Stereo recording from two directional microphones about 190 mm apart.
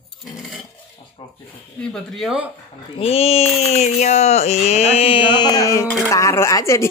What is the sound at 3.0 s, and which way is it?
A woman's voice, 30° left (ahead or behind).